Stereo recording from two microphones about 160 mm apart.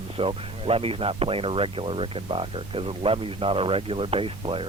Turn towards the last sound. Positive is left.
turn(degrees=-35)  # may be behind; listen again after turning